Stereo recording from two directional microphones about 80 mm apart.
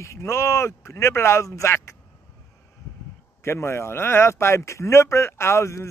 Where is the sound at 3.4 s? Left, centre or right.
Left.